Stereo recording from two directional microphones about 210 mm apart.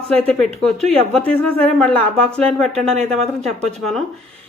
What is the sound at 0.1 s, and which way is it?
Speech, 5° left (ahead or behind).